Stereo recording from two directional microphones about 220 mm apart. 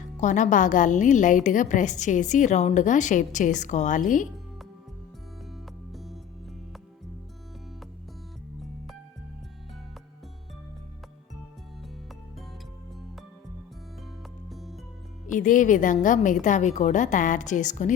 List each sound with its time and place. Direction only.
0.2 s a woman's voice: 35° left (ahead or behind)
5.9 s music: centre (ahead or behind)
14.5 s music: centre (ahead or behind)
15.3 s a woman's voice: 35° left (ahead or behind)